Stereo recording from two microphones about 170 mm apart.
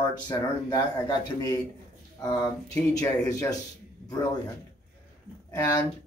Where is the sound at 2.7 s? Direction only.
15° left (ahead or behind).